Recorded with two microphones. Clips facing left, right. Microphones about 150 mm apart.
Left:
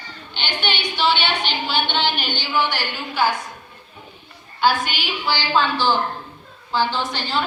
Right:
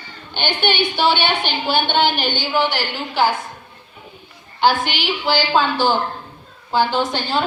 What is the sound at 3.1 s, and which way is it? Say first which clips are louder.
Speech: right 3 dB; 30° right (ahead or behind).